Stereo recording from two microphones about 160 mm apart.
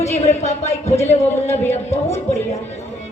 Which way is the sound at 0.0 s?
40° left (ahead or behind).